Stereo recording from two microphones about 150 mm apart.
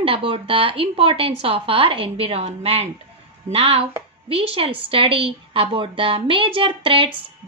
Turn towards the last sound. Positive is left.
turn(degrees=-35)  # may be behind; listen again after turning